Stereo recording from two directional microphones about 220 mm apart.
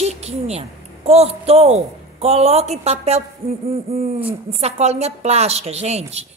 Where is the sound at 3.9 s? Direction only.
25° right (ahead or behind).